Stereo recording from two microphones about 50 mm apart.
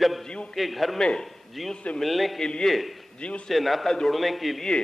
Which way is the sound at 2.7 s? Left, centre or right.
Centre.